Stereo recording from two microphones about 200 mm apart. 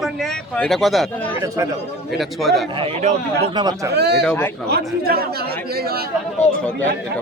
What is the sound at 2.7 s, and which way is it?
Speech, 25° right (ahead or behind).